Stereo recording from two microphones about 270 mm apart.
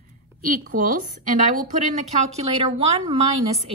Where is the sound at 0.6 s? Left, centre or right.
Right.